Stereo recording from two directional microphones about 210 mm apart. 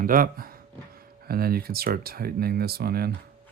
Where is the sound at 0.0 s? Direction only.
40° right (ahead or behind).